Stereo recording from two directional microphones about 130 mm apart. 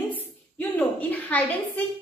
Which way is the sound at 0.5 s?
10° left (ahead or behind).